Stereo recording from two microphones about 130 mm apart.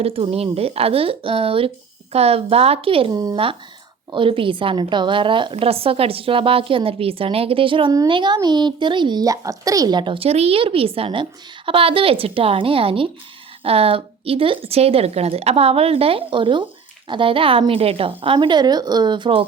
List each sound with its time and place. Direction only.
0.0 s a woman's voice: 50° right (ahead or behind)
3.1 s speech: 30° right (ahead or behind)
3.3 s a woman's voice: 45° right (ahead or behind)